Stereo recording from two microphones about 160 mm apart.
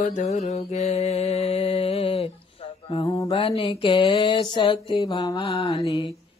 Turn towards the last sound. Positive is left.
turn(degrees=35)  # may be behind; listen again after turning